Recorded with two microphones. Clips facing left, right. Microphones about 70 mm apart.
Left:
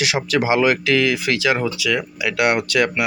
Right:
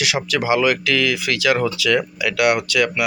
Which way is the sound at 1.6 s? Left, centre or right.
Centre.